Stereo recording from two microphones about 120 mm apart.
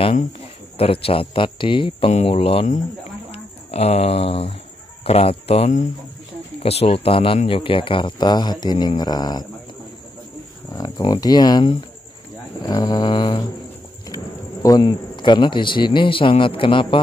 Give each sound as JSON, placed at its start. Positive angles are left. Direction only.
{"t": 0.7, "sound": "speech", "side_deg": 55}
{"t": 6.6, "sound": "speech", "side_deg": 55}
{"t": 11.0, "sound": "speech", "side_deg": 35}
{"t": 14.0, "sound": "a man's voice", "side_deg": 30}